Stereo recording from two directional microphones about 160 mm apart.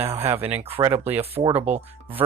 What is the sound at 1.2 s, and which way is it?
Speech, 35° right (ahead or behind).